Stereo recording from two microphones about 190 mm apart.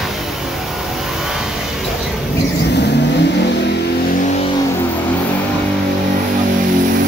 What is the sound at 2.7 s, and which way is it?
Vehicle, 65° left (ahead or behind).